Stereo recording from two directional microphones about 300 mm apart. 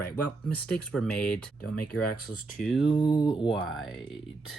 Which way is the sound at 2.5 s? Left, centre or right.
Centre.